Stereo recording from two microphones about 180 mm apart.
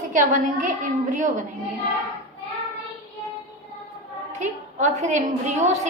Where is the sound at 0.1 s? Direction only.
45° right (ahead or behind).